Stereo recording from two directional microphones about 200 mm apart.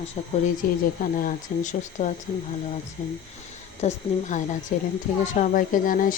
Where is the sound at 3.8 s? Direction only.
35° left (ahead or behind).